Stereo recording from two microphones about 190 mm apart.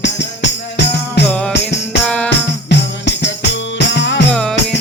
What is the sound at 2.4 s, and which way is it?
Music, 65° left (ahead or behind).